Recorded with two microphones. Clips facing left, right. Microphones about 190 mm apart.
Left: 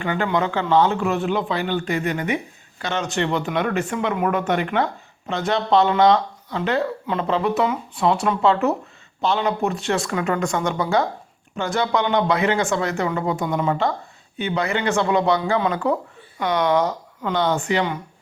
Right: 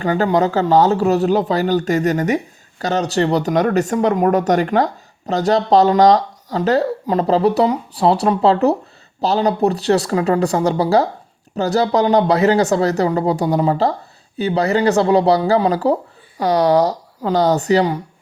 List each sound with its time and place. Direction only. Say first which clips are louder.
0.0 s speech: right 6 dB; 40° right (ahead or behind)